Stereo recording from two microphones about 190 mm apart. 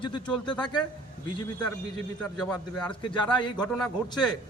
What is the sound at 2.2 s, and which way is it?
A man's voice, 5° left (ahead or behind).